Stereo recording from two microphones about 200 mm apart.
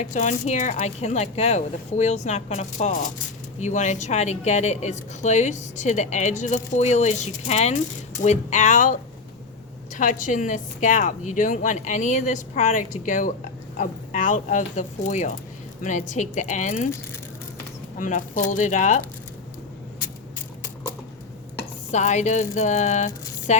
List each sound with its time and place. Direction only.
0.0 s a woman's voice: 35° left (ahead or behind)
17.9 s a woman's voice: 40° left (ahead or behind)
21.9 s a woman's voice: 35° left (ahead or behind)